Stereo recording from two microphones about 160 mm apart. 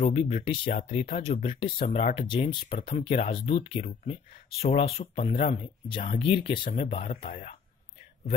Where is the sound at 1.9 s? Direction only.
45° left (ahead or behind).